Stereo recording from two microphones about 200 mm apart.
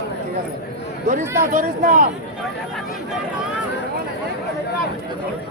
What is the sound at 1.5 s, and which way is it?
Speech, 40° right (ahead or behind).